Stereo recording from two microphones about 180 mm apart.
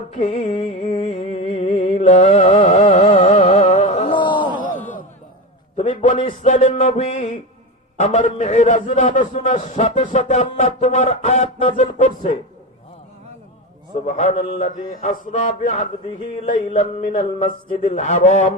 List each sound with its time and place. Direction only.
0.1 s speech: 40° left (ahead or behind)
0.4 s music: 30° left (ahead or behind)
0.9 s a sound: 45° left (ahead or behind)
1.1 s music: 35° left (ahead or behind)
2.0 s speech: 35° left (ahead or behind)
2.6 s music: 40° left (ahead or behind)
4.1 s a sound: 25° left (ahead or behind)
5.7 s speech: 45° left (ahead or behind)
14.0 s speech: 40° left (ahead or behind)